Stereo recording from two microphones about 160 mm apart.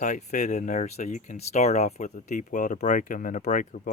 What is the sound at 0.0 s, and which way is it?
Speech, 50° left (ahead or behind).